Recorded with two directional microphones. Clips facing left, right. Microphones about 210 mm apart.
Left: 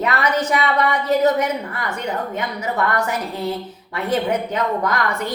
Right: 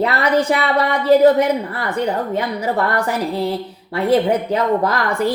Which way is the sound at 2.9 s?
35° right (ahead or behind).